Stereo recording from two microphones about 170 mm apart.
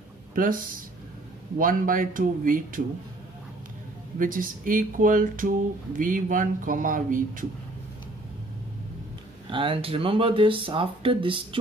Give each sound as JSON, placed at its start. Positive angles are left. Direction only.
{"t": 0.3, "sound": "speech", "side_deg": -55}
{"t": 4.2, "sound": "speech", "side_deg": -55}
{"t": 9.5, "sound": "speech", "side_deg": -30}